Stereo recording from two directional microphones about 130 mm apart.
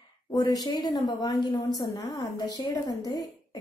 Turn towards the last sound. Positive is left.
turn(degrees=30)  # may be behind; listen again after turning